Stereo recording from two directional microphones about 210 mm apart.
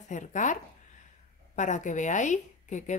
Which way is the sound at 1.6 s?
35° left (ahead or behind).